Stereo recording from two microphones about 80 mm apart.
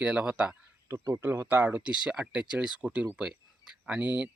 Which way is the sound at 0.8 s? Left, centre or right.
Right.